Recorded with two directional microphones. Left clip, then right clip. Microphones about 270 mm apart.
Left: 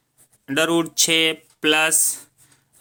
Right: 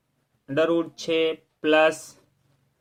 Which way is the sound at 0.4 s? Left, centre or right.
Left.